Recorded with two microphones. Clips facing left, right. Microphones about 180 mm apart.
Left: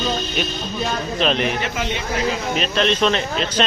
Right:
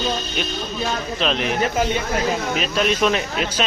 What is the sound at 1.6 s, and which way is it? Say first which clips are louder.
Speech: right 4 dB; 40° right (ahead or behind).